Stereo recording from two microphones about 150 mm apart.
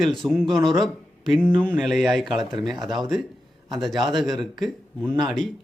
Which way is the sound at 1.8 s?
Centre (ahead or behind).